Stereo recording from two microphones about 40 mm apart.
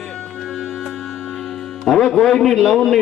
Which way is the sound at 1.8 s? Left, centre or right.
Centre.